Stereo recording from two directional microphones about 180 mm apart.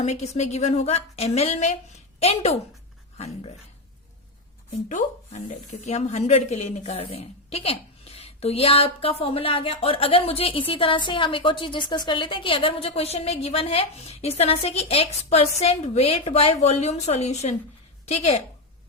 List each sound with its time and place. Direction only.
0.0 s a woman's voice: 35° left (ahead or behind)
4.9 s a woman's voice: 40° left (ahead or behind)